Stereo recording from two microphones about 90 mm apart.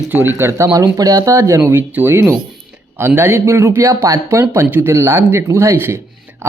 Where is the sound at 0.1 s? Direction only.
25° right (ahead or behind).